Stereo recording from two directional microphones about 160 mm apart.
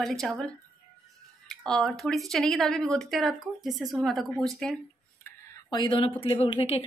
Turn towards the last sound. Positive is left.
turn(degrees=35)  # may be behind; listen again after turning